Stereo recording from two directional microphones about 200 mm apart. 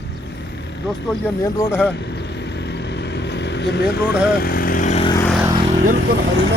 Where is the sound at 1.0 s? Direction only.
15° left (ahead or behind).